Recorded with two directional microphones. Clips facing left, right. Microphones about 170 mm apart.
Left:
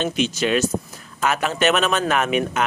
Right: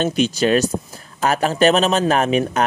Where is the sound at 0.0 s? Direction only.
35° right (ahead or behind).